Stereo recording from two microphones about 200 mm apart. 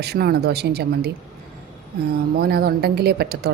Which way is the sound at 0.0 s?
50° right (ahead or behind).